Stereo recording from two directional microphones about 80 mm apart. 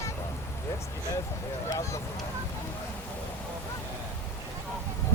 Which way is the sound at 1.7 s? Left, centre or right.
Left.